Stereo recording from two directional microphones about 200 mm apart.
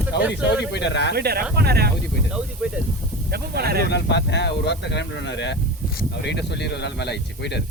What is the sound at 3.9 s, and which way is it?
Speech, 60° left (ahead or behind).